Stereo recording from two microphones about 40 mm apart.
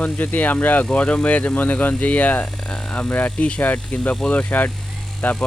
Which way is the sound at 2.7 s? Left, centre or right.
Left.